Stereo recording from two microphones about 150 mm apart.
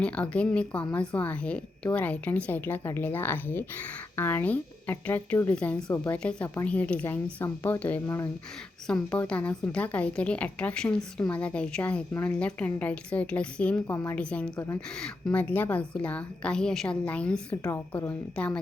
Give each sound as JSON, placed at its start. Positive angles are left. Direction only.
{"t": 0.0, "sound": "a woman's voice", "side_deg": 10}
{"t": 8.9, "sound": "a woman's voice", "side_deg": 10}
{"t": 14.2, "sound": "a woman's voice", "side_deg": 5}
{"t": 17.7, "sound": "a woman's voice", "side_deg": 20}
{"t": 18.3, "sound": "a woman's voice", "side_deg": 5}